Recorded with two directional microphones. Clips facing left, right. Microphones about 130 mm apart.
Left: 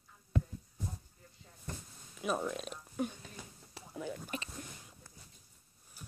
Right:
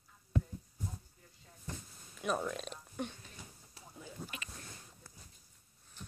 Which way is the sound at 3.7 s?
80° left.